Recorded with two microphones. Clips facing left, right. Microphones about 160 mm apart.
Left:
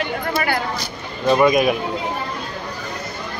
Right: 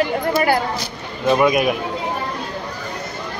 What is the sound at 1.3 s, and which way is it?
Speech, 5° right (ahead or behind).